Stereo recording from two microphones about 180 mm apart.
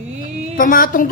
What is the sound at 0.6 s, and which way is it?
Speech, 50° left (ahead or behind).